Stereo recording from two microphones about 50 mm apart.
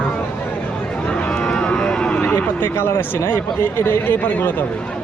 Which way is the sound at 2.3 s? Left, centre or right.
Left.